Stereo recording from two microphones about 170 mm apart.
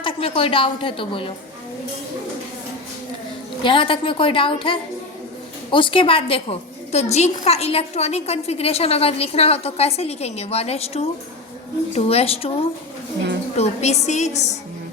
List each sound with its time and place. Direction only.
0.0 s a woman's voice: 30° left (ahead or behind)
3.6 s a woman's voice: 30° left (ahead or behind)
13.6 s a woman's voice: 40° left (ahead or behind)